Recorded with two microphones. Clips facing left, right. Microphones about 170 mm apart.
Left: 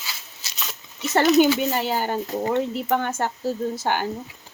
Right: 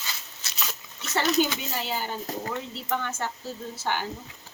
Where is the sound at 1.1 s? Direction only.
50° left (ahead or behind).